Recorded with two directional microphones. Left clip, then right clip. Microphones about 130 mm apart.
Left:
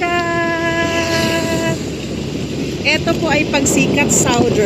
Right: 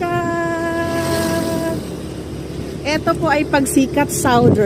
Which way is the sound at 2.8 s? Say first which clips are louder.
Left 1 dB; 25° right (ahead or behind).